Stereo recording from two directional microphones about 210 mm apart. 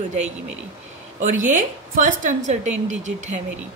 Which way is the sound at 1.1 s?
35° right (ahead or behind).